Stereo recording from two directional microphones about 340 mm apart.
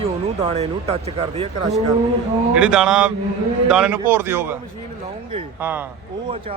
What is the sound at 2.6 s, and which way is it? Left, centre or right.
A man's voice, centre.